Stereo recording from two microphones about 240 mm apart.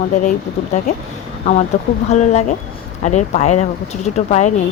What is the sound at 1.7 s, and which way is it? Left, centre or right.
Speech, left.